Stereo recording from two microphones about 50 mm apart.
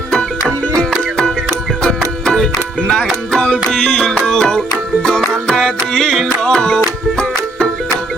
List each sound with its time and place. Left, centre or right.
0.7 s music: centre